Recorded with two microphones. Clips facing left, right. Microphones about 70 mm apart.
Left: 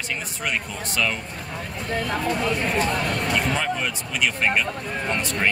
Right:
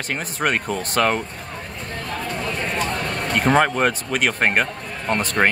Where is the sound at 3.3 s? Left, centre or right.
Right.